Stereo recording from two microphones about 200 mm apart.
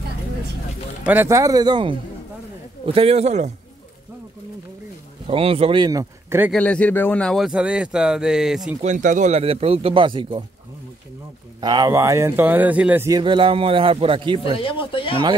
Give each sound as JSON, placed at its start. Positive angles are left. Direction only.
{"t": 1.0, "sound": "a man's voice", "side_deg": -10}
{"t": 5.2, "sound": "speech", "side_deg": -30}
{"t": 6.5, "sound": "speech", "side_deg": 5}
{"t": 8.8, "sound": "speech", "side_deg": -40}
{"t": 11.6, "sound": "speech", "side_deg": -20}
{"t": 13.2, "sound": "speech", "side_deg": -25}
{"t": 14.4, "sound": "speech", "side_deg": 25}